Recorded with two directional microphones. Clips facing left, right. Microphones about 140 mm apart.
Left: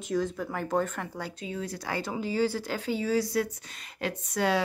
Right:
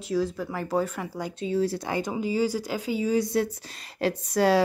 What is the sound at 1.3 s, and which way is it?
Speech, 30° right (ahead or behind).